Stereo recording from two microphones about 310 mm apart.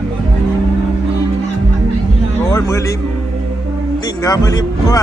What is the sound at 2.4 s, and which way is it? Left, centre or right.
Music, centre.